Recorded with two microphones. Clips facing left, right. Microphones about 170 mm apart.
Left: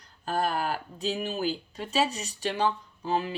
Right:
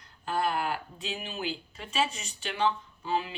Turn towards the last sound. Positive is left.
turn(degrees=45)  # may be behind; listen again after turning